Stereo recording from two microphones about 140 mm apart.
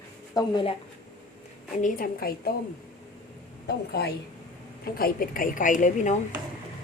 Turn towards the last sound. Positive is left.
turn(degrees=60)  # may be behind; listen again after turning